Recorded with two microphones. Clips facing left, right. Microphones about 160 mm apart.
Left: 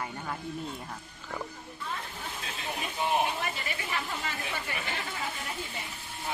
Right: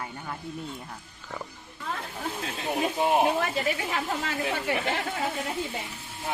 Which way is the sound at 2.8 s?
75° right (ahead or behind).